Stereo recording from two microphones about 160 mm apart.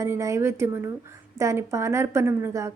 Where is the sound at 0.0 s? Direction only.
20° right (ahead or behind).